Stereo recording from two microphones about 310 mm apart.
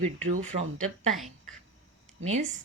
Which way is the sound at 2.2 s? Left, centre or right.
Right.